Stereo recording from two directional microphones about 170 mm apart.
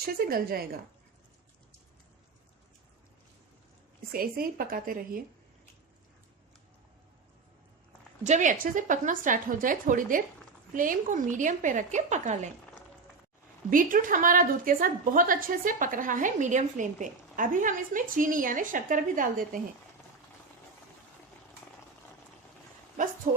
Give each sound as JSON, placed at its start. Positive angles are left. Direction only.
{"t": 0.0, "sound": "speech", "side_deg": -60}
{"t": 4.1, "sound": "speech", "side_deg": -60}
{"t": 8.2, "sound": "a woman's voice", "side_deg": -45}
{"t": 13.7, "sound": "a woman's voice", "side_deg": -55}
{"t": 23.3, "sound": "speech", "side_deg": -55}